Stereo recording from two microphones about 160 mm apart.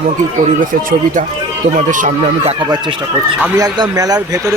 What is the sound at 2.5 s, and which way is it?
A man's voice, 30° right (ahead or behind).